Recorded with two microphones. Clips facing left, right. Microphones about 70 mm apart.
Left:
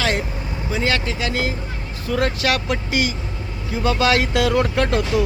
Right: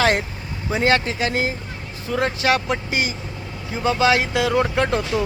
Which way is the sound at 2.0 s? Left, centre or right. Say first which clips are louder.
Even; right.